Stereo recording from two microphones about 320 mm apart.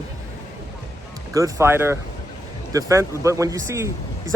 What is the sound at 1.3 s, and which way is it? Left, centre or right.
Speech, centre.